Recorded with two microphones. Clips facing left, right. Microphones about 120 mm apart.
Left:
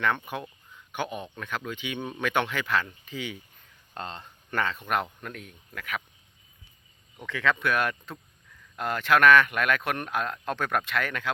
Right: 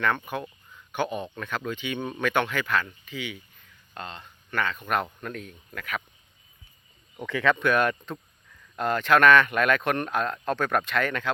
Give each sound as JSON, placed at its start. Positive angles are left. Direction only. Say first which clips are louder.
{"t": 0.9, "sound": "speech", "louder": "right 4 dB", "side_deg": 10}
{"t": 3.1, "sound": "speech", "louder": "even", "side_deg": 40}
{"t": 5.2, "sound": "speech", "louder": "right 4 dB", "side_deg": 10}
{"t": 7.3, "sound": "speech", "louder": "right 3 dB", "side_deg": 0}